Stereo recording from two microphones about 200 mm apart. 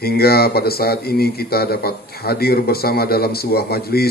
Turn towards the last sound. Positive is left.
turn(degrees=50)  # may be behind; listen again after turning